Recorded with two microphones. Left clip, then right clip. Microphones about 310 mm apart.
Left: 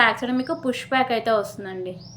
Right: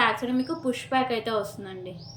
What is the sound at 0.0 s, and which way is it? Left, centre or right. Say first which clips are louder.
A woman's voice: left 4 dB; centre.